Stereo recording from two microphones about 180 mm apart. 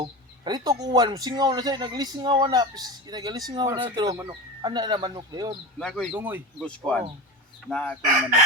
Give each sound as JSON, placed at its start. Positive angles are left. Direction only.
{"t": 0.0, "sound": "a man's voice", "side_deg": -25}
{"t": 5.8, "sound": "speech", "side_deg": 0}
{"t": 6.6, "sound": "speech", "side_deg": 5}